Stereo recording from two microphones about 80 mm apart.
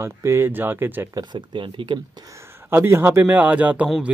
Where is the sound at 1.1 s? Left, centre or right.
Right.